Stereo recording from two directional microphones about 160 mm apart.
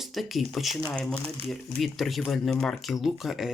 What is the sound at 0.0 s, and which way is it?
Speech, centre (ahead or behind).